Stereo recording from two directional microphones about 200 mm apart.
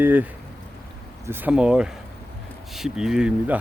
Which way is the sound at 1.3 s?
10° right (ahead or behind).